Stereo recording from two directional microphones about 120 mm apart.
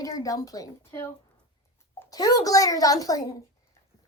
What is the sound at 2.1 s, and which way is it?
A woman's voice, 30° left (ahead or behind).